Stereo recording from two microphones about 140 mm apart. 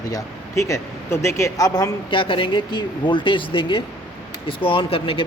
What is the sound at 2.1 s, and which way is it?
Speech, 40° left (ahead or behind).